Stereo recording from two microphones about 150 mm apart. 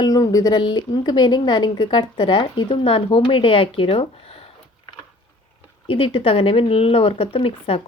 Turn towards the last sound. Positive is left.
turn(degrees=40)  # may be behind; listen again after turning